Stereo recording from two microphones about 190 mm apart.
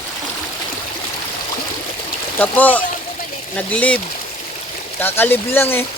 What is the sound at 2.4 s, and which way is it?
Speech, 10° left (ahead or behind).